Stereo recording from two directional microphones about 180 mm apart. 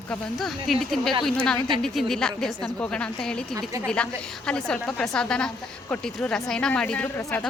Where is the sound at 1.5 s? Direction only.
25° right (ahead or behind).